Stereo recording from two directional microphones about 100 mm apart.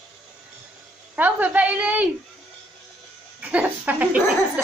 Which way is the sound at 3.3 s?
15° right (ahead or behind).